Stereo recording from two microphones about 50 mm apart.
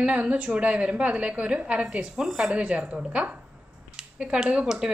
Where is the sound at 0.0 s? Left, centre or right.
Right; by 2.5 s centre.